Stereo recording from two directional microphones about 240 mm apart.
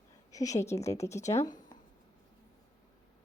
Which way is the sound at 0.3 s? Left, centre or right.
Centre.